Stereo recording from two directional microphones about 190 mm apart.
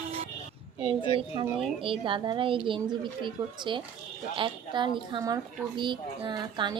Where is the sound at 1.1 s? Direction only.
25° right (ahead or behind).